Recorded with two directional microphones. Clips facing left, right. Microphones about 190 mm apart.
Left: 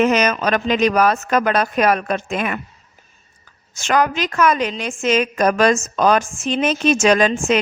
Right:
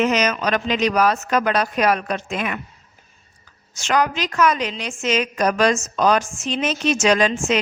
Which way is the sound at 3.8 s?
50° left (ahead or behind).